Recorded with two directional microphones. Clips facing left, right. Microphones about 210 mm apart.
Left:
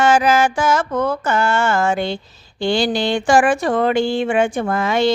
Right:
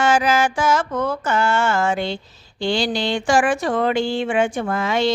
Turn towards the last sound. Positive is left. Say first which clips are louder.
# left 3 dB
turn(degrees=50)  # may be behind; listen again after turning